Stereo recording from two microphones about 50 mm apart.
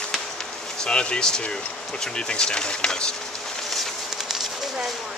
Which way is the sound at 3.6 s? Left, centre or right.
Centre.